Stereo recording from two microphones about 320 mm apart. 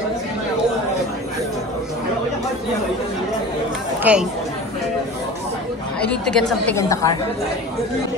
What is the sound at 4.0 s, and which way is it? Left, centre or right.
Speech, centre.